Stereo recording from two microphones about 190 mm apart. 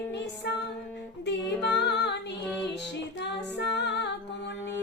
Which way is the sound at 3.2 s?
65° left (ahead or behind).